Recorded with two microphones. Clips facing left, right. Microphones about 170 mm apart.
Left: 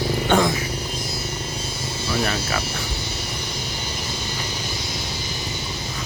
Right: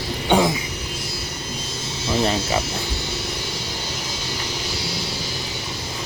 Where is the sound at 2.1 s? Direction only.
20° right (ahead or behind).